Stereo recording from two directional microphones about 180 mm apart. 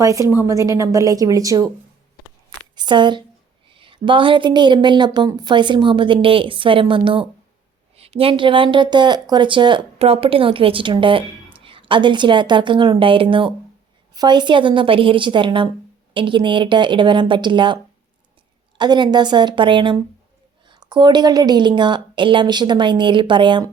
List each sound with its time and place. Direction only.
0.0 s a woman's voice: 20° right (ahead or behind)
2.7 s a woman's voice: 25° right (ahead or behind)
18.8 s a woman's voice: 25° right (ahead or behind)